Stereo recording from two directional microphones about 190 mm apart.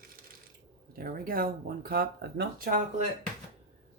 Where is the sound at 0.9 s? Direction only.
50° right (ahead or behind).